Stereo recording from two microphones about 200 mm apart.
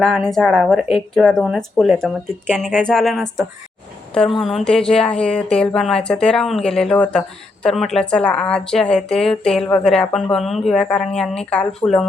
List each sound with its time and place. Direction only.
0.0 s speech: centre (ahead or behind)